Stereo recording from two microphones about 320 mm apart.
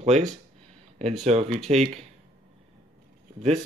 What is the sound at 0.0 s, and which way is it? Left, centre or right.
Speech, centre.